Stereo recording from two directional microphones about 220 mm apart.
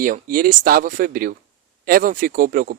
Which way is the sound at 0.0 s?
40° right (ahead or behind).